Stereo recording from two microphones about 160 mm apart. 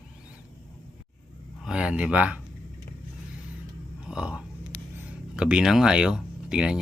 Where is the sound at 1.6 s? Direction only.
5° right (ahead or behind).